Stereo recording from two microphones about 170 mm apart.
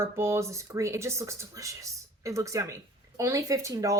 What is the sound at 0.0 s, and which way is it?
Speech, 15° right (ahead or behind).